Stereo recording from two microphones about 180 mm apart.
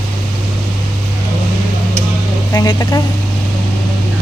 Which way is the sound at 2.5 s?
20° left (ahead or behind).